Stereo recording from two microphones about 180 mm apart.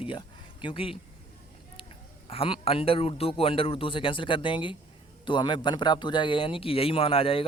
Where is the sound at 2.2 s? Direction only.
30° left (ahead or behind).